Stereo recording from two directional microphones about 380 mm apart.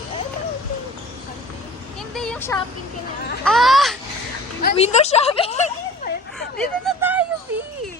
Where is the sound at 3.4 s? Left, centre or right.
Centre.